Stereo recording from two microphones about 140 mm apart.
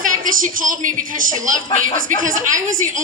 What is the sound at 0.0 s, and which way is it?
A woman's voice, 75° right (ahead or behind).